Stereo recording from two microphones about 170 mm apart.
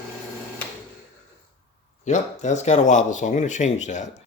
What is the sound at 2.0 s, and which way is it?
Speech, 45° left (ahead or behind).